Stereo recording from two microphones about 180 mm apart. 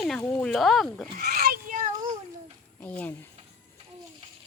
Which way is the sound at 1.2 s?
50° right (ahead or behind).